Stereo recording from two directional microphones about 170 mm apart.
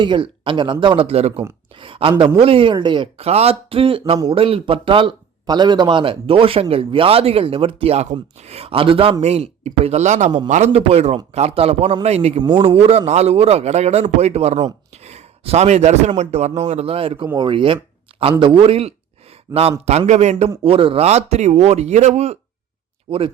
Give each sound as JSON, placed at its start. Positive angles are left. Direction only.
{"t": 0.0, "sound": "speech", "side_deg": -30}
{"t": 12.4, "sound": "a man's voice", "side_deg": -25}